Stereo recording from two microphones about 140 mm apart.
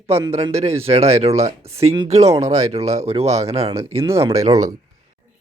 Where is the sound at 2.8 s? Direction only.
50° right (ahead or behind).